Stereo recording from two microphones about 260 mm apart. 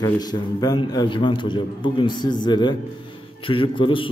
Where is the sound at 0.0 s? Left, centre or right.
Centre.